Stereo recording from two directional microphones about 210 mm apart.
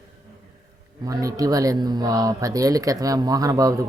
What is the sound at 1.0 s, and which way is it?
A man's voice, 15° right (ahead or behind).